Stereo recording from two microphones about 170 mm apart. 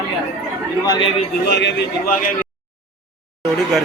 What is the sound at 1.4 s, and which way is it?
Speech, 85° left.